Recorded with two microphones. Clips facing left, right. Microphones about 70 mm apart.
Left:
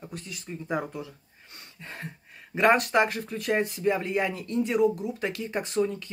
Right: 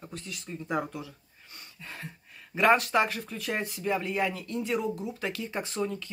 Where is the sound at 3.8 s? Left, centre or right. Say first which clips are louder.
Left 3 dB; left.